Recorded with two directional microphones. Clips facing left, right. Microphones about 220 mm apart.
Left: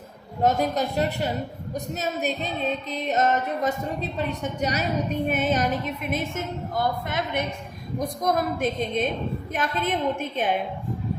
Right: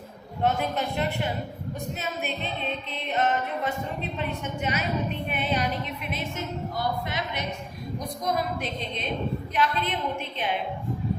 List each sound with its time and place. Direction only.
0.4 s music: 40° left (ahead or behind)
5.3 s a woman's voice: 45° left (ahead or behind)